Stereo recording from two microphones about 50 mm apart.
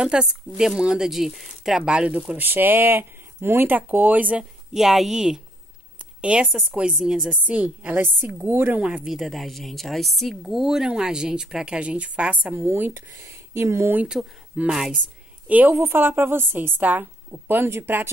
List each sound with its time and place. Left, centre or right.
0.0 s speech: centre; by 4.4 s right
4.7 s speech: centre
6.2 s speech: right
7.4 s speech: right
8.0 s speech: right
9.0 s a woman's voice: centre
10.4 s speech: centre; by 12.5 s right
12.5 s speech: right
13.3 s speech: right
14.2 s speech: centre
15.4 s a woman's voice: right
15.7 s speech: right
16.8 s speech: right
17.3 s speech: right